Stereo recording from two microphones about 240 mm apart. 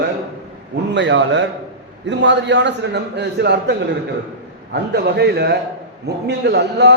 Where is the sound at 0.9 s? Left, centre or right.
Right.